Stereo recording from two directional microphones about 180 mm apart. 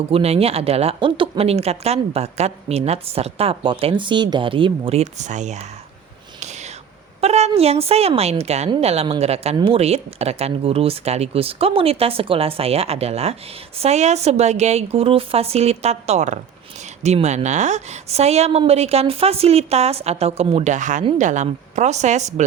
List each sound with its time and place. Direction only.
0.1 s a woman's voice: 35° right (ahead or behind)
7.2 s a woman's voice: 35° right (ahead or behind)